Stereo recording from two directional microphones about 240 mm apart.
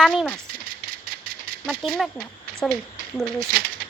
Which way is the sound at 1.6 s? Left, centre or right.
Centre.